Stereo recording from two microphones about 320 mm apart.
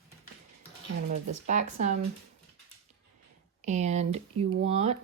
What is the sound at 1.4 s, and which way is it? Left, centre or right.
Speech, right.